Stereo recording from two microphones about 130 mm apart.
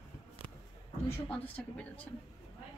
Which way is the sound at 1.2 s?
10° left (ahead or behind).